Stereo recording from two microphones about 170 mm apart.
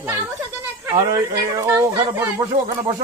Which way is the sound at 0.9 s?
20° right (ahead or behind).